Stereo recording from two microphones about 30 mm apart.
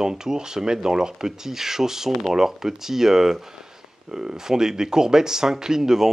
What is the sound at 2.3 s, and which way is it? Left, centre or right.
Speech, centre.